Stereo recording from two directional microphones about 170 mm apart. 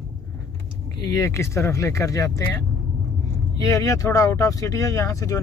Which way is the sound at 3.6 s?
20° left (ahead or behind).